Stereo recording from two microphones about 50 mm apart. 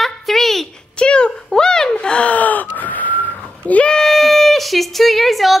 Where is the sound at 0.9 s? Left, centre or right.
Centre.